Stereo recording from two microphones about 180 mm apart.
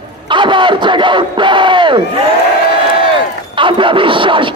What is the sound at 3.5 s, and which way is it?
Speech, 30° right (ahead or behind).